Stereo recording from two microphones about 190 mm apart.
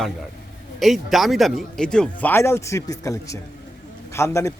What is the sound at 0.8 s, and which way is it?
A man's voice, centre (ahead or behind).